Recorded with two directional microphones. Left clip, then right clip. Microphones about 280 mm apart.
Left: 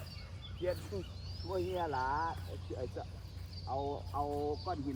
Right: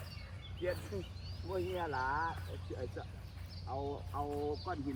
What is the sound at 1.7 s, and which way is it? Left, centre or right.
Speech, left.